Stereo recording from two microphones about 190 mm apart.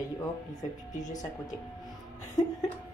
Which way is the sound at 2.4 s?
20° left (ahead or behind).